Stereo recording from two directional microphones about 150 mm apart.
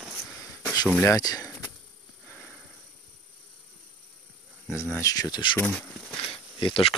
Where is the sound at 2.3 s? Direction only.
5° left (ahead or behind).